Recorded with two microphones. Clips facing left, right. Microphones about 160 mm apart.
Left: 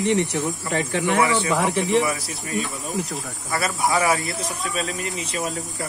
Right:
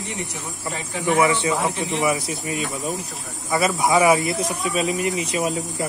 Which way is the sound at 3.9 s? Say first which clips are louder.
Right 4 dB; 15° right (ahead or behind).